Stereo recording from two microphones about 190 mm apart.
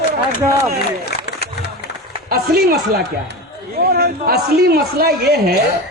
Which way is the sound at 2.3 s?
55° right (ahead or behind).